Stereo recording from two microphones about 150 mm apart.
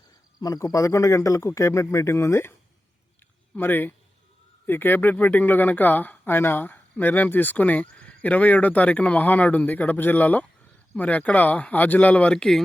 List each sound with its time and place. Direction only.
0.3 s a man's voice: 25° left (ahead or behind)
3.5 s speech: 15° left (ahead or behind)